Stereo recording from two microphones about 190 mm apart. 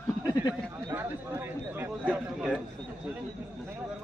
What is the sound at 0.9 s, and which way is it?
Speech, 10° right (ahead or behind).